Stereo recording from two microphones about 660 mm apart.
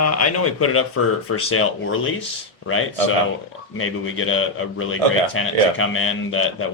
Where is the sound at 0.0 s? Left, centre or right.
Left.